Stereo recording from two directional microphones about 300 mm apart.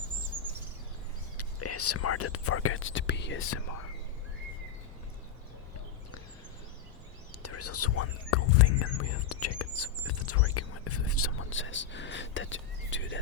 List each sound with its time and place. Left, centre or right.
1.4 s speech: left
7.4 s speech: left